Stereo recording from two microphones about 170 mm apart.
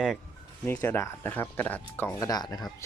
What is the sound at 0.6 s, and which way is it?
Speech, 10° left (ahead or behind).